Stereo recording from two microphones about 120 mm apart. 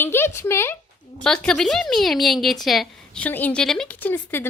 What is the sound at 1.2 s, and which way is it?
A woman's voice, 5° left (ahead or behind).